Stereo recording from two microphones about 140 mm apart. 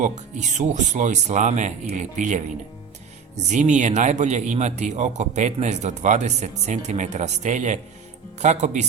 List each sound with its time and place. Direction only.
0.0 s speech: 60° right (ahead or behind)